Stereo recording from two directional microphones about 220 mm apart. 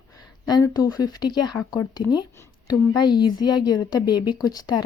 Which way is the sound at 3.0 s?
20° left (ahead or behind).